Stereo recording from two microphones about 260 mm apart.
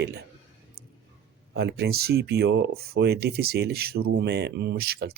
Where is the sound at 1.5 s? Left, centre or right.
Right.